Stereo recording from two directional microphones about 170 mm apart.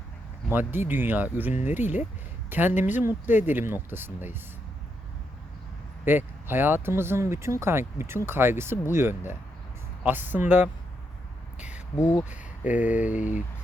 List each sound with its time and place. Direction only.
0.7 s speech: 10° right (ahead or behind)
6.1 s speech: 15° right (ahead or behind)
11.9 s speech: 15° left (ahead or behind)
12.3 s speech: 10° right (ahead or behind)
13.1 s speech: 50° left (ahead or behind)